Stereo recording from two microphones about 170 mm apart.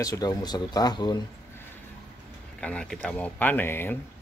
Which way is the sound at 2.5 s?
5° left (ahead or behind).